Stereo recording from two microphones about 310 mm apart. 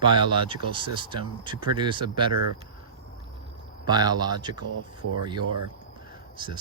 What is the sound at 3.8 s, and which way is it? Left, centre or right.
Speech, centre.